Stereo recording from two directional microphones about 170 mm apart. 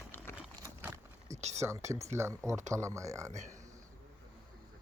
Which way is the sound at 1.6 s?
15° right (ahead or behind).